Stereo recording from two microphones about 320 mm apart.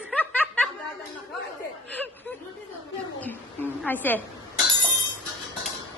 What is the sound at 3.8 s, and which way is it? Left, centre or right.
Speech, centre.